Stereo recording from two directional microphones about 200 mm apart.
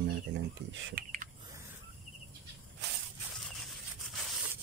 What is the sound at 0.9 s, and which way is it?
Typing, 40° right (ahead or behind).